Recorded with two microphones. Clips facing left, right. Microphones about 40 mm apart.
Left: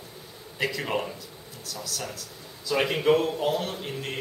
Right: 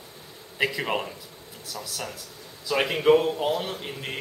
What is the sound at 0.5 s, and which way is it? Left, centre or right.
Speech, centre.